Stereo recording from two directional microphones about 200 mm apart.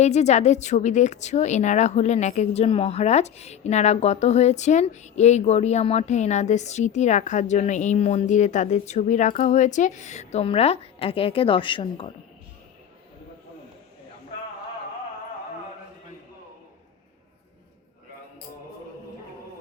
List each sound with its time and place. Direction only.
0.0 s a woman's voice: 35° left (ahead or behind)